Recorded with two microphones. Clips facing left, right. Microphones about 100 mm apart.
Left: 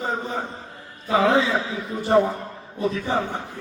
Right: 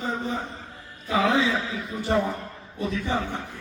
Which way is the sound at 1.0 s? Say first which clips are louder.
Left 4 dB; 30° left (ahead or behind).